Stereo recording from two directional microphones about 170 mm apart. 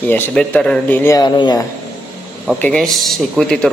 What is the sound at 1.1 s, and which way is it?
Speech, 25° left (ahead or behind).